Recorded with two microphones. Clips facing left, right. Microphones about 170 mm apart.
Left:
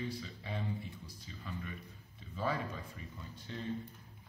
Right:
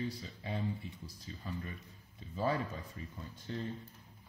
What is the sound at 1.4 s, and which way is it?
Speech, 35° right (ahead or behind).